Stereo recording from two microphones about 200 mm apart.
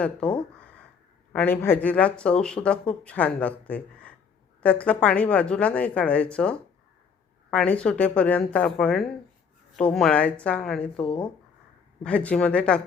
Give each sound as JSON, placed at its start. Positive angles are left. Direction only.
{"t": 0.0, "sound": "a woman's voice", "side_deg": 5}